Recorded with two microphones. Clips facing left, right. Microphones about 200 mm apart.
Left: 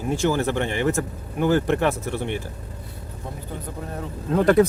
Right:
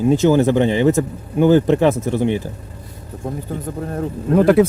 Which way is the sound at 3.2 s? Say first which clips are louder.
Right 9 dB; 45° right (ahead or behind).